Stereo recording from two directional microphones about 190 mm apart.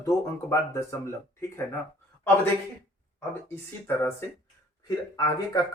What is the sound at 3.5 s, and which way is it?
Speech, 10° left (ahead or behind).